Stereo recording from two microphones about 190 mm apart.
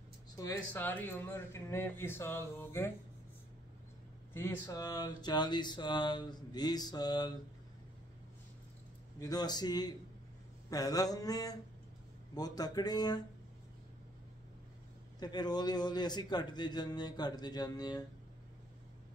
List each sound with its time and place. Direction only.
0.4 s speech: 15° left (ahead or behind)
4.3 s speech: 15° left (ahead or behind)
9.2 s speech: 20° left (ahead or behind)
15.1 s speech: 20° left (ahead or behind)